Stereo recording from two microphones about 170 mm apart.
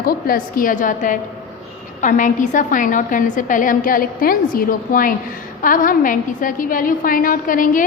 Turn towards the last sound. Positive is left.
turn(degrees=55)  # may be behind; listen again after turning